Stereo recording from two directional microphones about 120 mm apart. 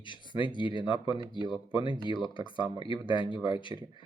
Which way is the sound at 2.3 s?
45° left (ahead or behind).